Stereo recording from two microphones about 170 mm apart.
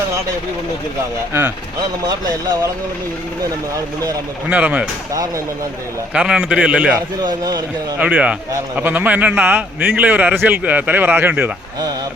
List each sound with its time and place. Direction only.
1.3 s a man's voice: 10° right (ahead or behind)
4.4 s a man's voice: 10° right (ahead or behind)
6.1 s a man's voice: 5° right (ahead or behind)
7.2 s speech: 25° right (ahead or behind)
7.9 s a man's voice: 5° right (ahead or behind)